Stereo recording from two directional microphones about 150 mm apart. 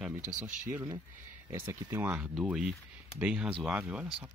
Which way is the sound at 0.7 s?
20° right (ahead or behind).